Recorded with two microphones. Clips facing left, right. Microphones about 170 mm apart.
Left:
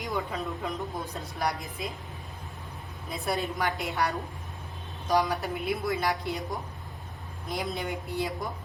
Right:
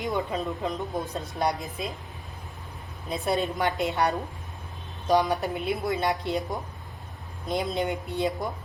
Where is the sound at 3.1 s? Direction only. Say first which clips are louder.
Right 4 dB; 20° right (ahead or behind).